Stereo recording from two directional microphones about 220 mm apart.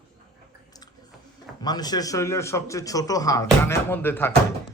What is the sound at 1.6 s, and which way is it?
Speech, 20° left (ahead or behind).